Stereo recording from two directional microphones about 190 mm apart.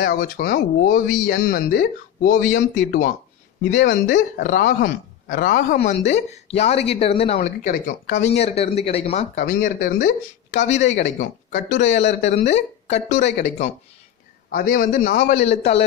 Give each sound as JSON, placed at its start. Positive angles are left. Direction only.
{"t": 0.0, "sound": "speech", "side_deg": 50}
{"t": 2.5, "sound": "speech", "side_deg": 80}
{"t": 4.0, "sound": "speech", "side_deg": 45}
{"t": 5.8, "sound": "speech", "side_deg": 35}
{"t": 7.3, "sound": "speech", "side_deg": 45}
{"t": 8.2, "sound": "speech", "side_deg": 35}
{"t": 9.3, "sound": "speech", "side_deg": 50}
{"t": 14.5, "sound": "speech", "side_deg": 50}
{"t": 15.4, "sound": "speech", "side_deg": 35}